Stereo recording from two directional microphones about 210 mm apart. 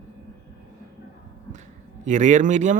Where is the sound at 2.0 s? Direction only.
35° right (ahead or behind).